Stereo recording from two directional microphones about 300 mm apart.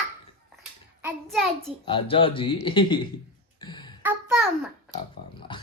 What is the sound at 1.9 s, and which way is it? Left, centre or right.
A man's voice, centre.